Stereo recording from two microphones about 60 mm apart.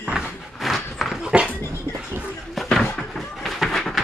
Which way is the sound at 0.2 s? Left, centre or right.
Centre.